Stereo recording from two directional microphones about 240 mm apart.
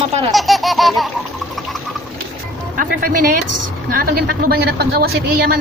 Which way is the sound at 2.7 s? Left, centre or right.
Right.